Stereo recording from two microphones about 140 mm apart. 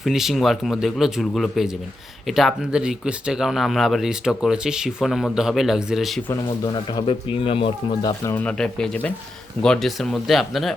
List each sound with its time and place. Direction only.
0.0 s speech: centre (ahead or behind)
7.1 s speech: 40° left (ahead or behind)
8.2 s speech: 20° left (ahead or behind)
8.4 s speech: 5° left (ahead or behind)